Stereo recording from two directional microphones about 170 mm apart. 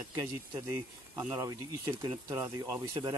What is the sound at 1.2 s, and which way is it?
Speech, 20° right (ahead or behind).